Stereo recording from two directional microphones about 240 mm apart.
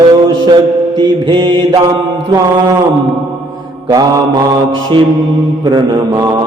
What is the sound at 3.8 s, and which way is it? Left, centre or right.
Mantra, centre.